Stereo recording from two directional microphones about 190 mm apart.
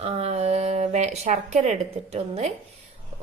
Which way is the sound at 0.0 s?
35° right (ahead or behind).